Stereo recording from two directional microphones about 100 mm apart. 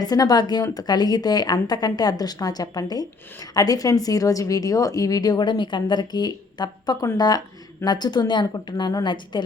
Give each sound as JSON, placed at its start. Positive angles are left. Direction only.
{"t": 0.0, "sound": "a woman's voice", "side_deg": 40}